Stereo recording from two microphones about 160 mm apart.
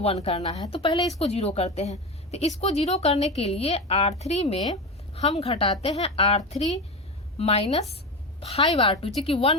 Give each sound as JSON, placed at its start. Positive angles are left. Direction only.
{"t": 0.0, "sound": "a woman's voice", "side_deg": 40}